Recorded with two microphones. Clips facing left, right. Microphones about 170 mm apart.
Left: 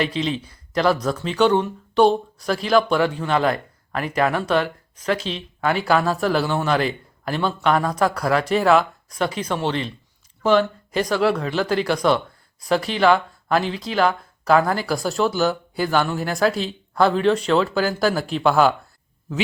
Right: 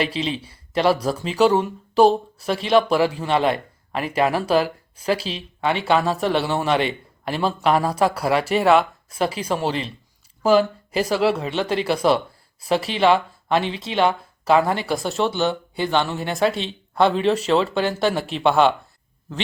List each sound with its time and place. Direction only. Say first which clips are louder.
0.0 s a man's voice: left 1 dB; 30° right (ahead or behind)
1.1 s speech: even; 10° right (ahead or behind)
3.2 s speech: even; 30° right (ahead or behind)
5.2 s speech: even; 5° right (ahead or behind)
7.4 s speech: right 1 dB; 30° right (ahead or behind)
8.2 s speech: even; 5° right (ahead or behind)
9.2 s speech: right 1 dB; 30° right (ahead or behind)
10.4 s speech: right 1 dB; 10° right (ahead or behind)
12.9 s speech: even; 30° right (ahead or behind)
13.5 s speech: even; centre (ahead or behind)
13.7 s speech: even; 25° right (ahead or behind)
14.4 s speech: even; centre (ahead or behind)